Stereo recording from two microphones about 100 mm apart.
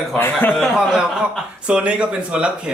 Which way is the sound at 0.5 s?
5° right (ahead or behind).